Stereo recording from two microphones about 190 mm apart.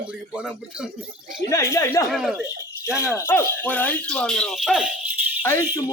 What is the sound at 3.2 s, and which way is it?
Speech, 10° left (ahead or behind).